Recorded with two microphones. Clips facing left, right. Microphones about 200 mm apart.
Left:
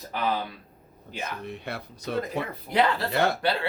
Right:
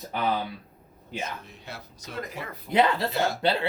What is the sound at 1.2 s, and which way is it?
Speech, 60° left (ahead or behind).